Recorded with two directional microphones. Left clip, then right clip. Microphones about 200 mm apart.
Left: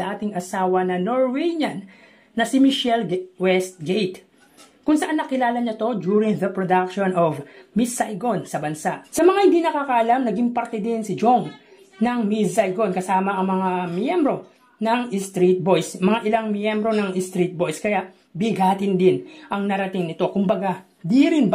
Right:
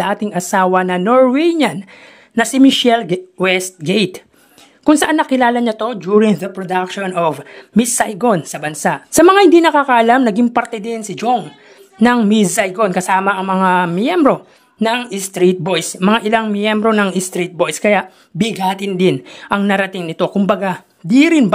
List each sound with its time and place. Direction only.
0.0 s speech: 30° right (ahead or behind)
6.4 s speech: centre (ahead or behind)
6.7 s speech: 35° right (ahead or behind)
16.0 s speech: 25° right (ahead or behind)